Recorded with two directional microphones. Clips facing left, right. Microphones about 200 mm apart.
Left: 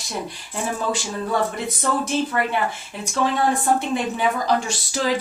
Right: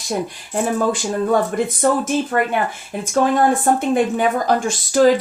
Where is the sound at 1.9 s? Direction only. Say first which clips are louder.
Right 3 dB; 45° right (ahead or behind).